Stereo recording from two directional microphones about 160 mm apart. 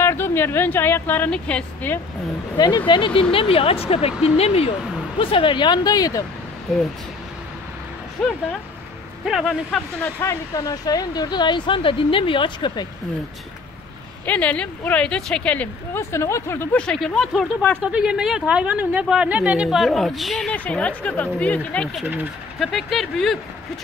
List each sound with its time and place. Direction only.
0.0 s speech: 15° left (ahead or behind)
2.5 s speech: 25° left (ahead or behind)
9.2 s a woman's voice: centre (ahead or behind)
10.2 s speech: 20° left (ahead or behind)
14.2 s a woman's voice: 10° left (ahead or behind)